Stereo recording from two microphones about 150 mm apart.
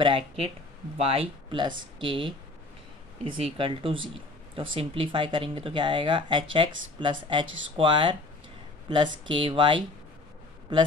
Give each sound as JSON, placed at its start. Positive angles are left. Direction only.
{"t": 0.9, "sound": "speech", "side_deg": -40}